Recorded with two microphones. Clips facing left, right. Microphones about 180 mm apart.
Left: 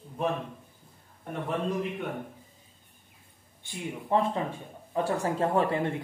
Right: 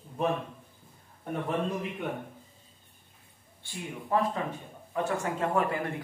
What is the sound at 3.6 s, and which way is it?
A man's voice, 25° left (ahead or behind).